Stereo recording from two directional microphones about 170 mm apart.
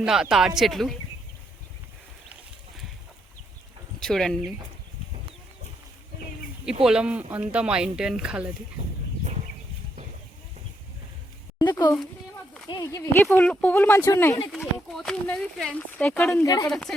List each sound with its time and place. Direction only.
0.0 s speech: 5° right (ahead or behind)
4.0 s speech: centre (ahead or behind)
6.8 s speech: 5° right (ahead or behind)
11.6 s speech: 20° left (ahead or behind)
13.3 s speech: 5° left (ahead or behind)
14.5 s speech: centre (ahead or behind); by 16.6 s 20° left (ahead or behind)
16.6 s speech: 5° left (ahead or behind)